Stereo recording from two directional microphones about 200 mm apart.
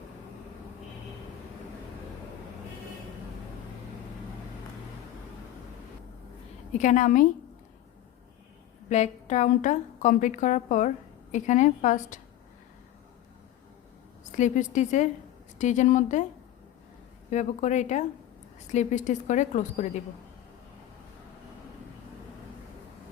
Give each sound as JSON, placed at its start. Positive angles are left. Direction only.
{"t": 6.7, "sound": "a woman's voice", "side_deg": 40}
{"t": 8.9, "sound": "a woman's voice", "side_deg": 35}
{"t": 14.3, "sound": "a woman's voice", "side_deg": 40}
{"t": 17.3, "sound": "a woman's voice", "side_deg": 35}